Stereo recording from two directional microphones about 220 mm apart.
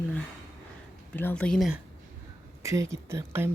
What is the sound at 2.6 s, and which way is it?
Speech, 15° right (ahead or behind).